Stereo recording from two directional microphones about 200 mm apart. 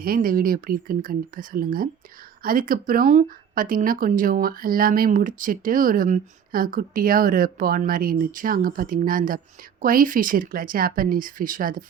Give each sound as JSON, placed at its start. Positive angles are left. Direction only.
{"t": 0.0, "sound": "speech", "side_deg": -45}